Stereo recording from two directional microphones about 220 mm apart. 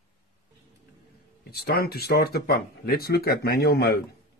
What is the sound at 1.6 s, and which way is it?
A man's voice, 45° left (ahead or behind).